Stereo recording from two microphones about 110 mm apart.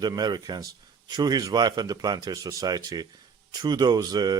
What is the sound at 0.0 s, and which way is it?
Speech, 40° right (ahead or behind).